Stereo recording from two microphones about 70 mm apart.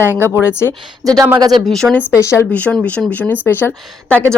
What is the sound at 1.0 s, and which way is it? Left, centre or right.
Speech, right.